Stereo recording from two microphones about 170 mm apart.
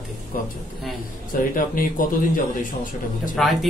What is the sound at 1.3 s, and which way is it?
Speech, 55° left (ahead or behind).